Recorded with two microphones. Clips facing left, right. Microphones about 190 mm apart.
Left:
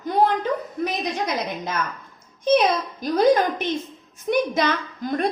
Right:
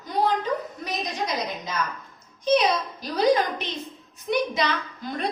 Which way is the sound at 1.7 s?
55° left (ahead or behind).